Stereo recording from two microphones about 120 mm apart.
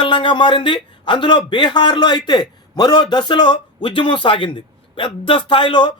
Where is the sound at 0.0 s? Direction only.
45° left (ahead or behind).